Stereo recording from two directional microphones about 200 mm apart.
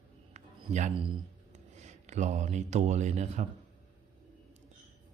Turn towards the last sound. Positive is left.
turn(degrees=-35)  # may be behind; listen again after turning